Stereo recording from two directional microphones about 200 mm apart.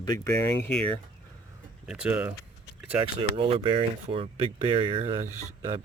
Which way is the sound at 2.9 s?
30° right (ahead or behind).